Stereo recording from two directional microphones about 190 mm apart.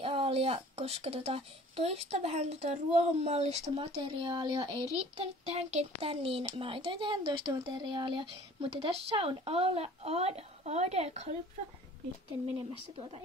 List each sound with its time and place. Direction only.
0.0 s a child's voice: 30° right (ahead or behind)